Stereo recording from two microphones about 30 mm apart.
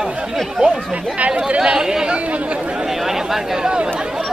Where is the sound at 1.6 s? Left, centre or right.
Right.